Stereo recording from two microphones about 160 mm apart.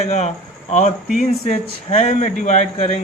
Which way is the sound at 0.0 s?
45° left (ahead or behind).